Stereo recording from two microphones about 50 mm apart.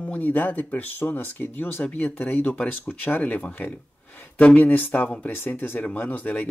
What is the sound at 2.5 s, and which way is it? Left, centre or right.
Speech, left.